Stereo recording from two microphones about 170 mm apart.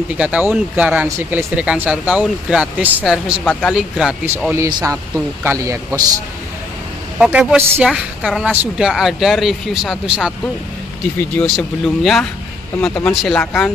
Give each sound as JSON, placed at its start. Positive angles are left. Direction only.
{"t": 0.2, "sound": "a woman's voice", "side_deg": -10}
{"t": 7.2, "sound": "a woman's voice", "side_deg": -5}
{"t": 11.1, "sound": "a woman's voice", "side_deg": 10}